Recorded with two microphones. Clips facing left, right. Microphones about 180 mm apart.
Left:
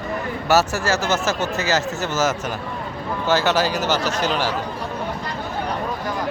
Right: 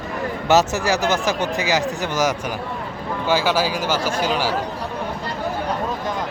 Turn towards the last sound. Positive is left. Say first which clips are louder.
# right 1 dB
turn(degrees=-10)  # may be behind; listen again after turning